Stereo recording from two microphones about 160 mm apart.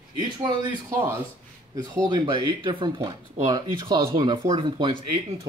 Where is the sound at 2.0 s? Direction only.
30° right (ahead or behind).